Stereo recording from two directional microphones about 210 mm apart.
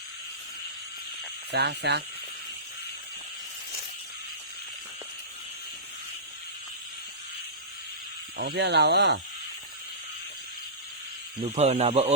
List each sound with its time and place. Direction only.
1.5 s speech: 55° right (ahead or behind)
8.4 s speech: 50° right (ahead or behind)
11.5 s speech: 30° right (ahead or behind)